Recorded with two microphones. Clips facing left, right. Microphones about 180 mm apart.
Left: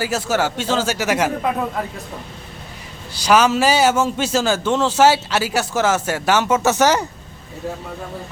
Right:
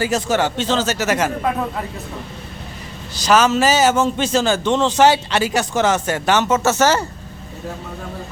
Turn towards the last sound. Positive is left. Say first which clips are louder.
# even
turn(degrees=15)  # may be behind; listen again after turning